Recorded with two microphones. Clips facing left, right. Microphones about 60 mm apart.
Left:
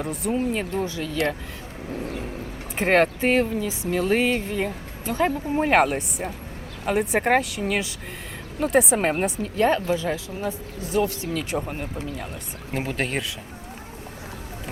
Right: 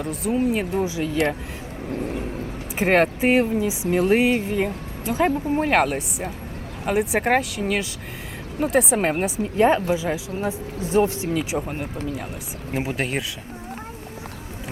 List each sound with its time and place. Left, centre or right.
0.0 s speech: centre
2.7 s speech: centre
3.2 s speech: centre
9.4 s speech: centre
10.3 s speech: right
11.2 s speech: centre
11.5 s speech: centre